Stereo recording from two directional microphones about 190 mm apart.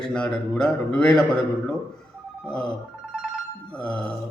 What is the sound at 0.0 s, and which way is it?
Speech, 5° left (ahead or behind).